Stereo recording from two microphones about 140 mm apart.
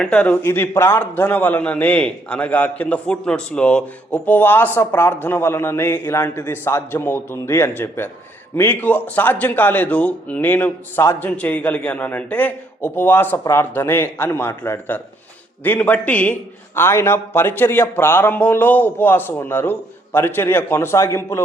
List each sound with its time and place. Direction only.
0.0 s a man's voice: 5° left (ahead or behind)